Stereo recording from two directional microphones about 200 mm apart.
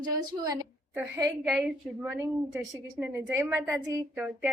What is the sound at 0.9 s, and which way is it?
A woman's voice, 5° right (ahead or behind).